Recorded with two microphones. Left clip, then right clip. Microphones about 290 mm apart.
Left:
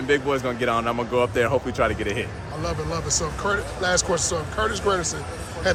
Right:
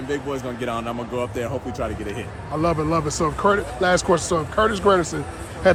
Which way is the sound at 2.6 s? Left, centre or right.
Right.